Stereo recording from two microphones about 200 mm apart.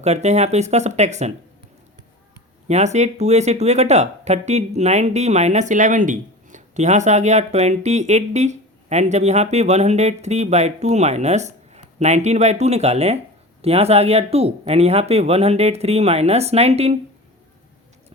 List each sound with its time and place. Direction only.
0.0 s speech: 35° right (ahead or behind)
2.6 s speech: 35° right (ahead or behind)